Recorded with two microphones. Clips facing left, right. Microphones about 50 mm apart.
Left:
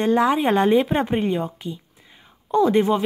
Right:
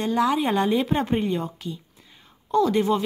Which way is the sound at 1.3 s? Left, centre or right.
Centre.